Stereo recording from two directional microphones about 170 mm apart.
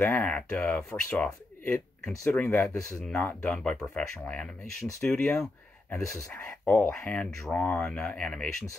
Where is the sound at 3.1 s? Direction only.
5° left (ahead or behind).